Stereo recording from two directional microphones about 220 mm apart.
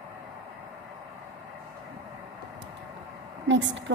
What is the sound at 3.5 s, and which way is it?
Speech, 55° right (ahead or behind).